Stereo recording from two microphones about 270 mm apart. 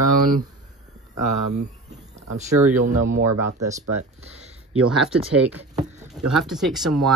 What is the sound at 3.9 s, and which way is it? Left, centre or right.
Speech, right.